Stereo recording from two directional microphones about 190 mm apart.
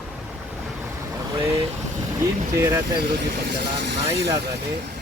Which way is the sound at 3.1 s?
60° right (ahead or behind).